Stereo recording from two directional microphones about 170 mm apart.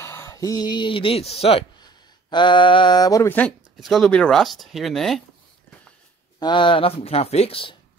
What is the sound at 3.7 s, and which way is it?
Speech, centre (ahead or behind).